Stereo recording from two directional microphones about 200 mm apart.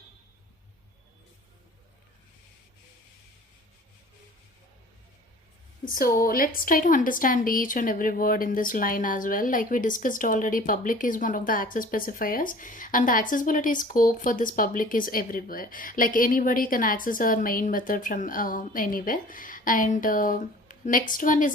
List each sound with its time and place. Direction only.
5.8 s a woman's voice: 45° left (ahead or behind)